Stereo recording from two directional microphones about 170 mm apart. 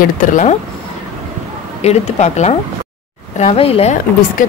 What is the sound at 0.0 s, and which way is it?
Speech, 50° left (ahead or behind).